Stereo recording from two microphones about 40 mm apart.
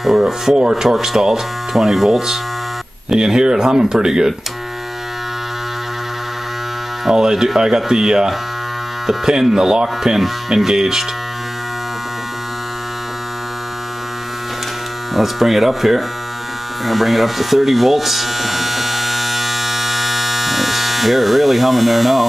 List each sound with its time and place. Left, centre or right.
0.6 s speech: centre
0.8 s speech: centre
7.1 s speech: centre
15.1 s speech: centre
16.8 s electric shaver: centre